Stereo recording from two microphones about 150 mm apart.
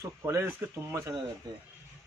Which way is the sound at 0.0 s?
20° right (ahead or behind).